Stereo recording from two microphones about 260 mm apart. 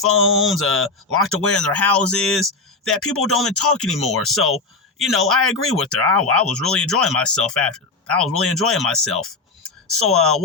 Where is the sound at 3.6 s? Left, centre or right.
Left.